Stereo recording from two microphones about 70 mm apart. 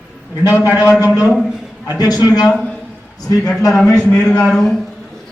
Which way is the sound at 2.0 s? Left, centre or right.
Left.